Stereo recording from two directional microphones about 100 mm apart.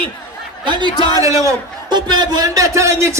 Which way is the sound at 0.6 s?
50° right (ahead or behind).